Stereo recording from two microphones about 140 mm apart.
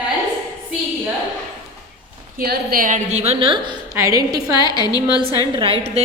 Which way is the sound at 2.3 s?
90° right.